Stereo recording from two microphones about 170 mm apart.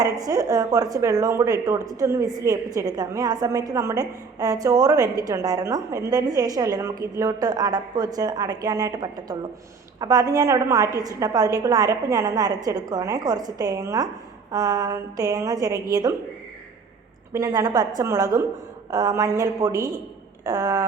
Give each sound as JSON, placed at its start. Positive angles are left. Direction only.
{"t": 0.0, "sound": "a woman's voice", "side_deg": -20}
{"t": 17.3, "sound": "a woman's voice", "side_deg": -20}